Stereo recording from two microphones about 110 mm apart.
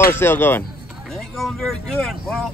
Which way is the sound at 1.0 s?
Centre (ahead or behind).